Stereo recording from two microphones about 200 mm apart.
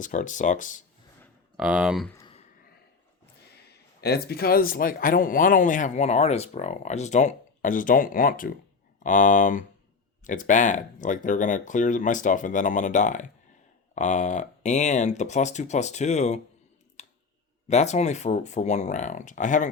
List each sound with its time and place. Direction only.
0.0 s speech: 40° left (ahead or behind)
1.5 s speech: 5° right (ahead or behind)
3.7 s a man's voice: 55° left (ahead or behind); by 16.4 s 35° left (ahead or behind)
17.0 s a sound: 35° left (ahead or behind)
17.7 s speech: 35° left (ahead or behind)